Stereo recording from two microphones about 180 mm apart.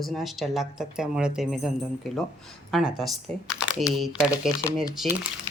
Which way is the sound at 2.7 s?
5° right (ahead or behind).